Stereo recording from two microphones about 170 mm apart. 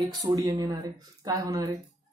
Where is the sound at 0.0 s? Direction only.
25° right (ahead or behind).